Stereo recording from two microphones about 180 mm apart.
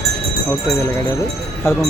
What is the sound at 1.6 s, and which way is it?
Speech, 15° left (ahead or behind).